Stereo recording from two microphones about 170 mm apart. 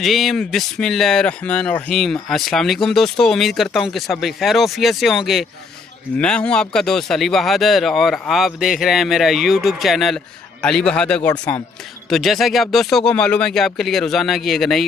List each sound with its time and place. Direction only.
0.0 s speech: centre (ahead or behind)